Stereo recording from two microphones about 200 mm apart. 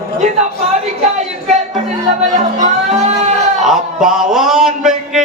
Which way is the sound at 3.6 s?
Centre (ahead or behind).